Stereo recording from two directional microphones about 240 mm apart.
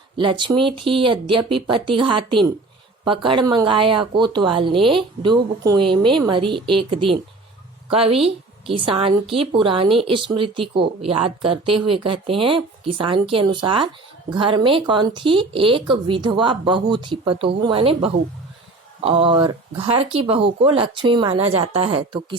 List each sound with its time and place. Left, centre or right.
0.2 s a woman's voice: centre